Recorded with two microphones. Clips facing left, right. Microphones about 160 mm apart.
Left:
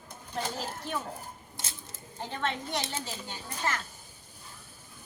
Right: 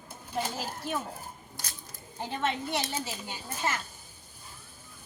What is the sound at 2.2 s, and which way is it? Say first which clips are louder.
Speech: right 2 dB; 15° right (ahead or behind).